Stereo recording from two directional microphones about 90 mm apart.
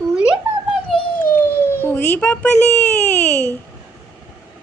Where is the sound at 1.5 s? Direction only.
25° left (ahead or behind).